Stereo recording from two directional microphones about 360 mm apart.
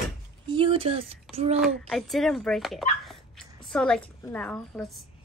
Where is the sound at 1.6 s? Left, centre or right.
Centre.